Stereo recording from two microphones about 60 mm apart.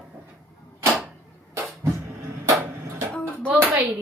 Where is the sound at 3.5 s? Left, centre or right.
Right.